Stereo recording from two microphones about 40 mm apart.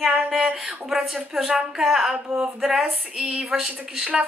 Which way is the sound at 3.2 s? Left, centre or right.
Right.